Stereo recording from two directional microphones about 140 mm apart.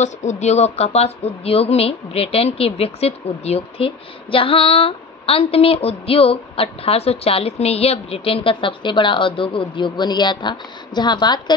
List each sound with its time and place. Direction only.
0.0 s a woman's voice: 55° left (ahead or behind); by 11.5 s 30° left (ahead or behind)